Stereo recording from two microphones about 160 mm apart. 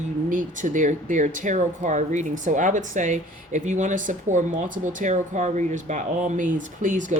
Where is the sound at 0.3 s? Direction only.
55° right (ahead or behind).